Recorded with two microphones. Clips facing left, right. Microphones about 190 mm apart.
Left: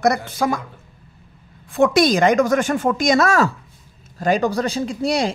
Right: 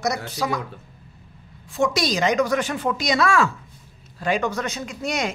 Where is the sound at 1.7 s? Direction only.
55° left (ahead or behind).